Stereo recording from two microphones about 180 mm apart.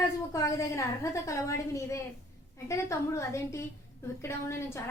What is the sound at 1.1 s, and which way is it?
A woman's voice, 15° left (ahead or behind).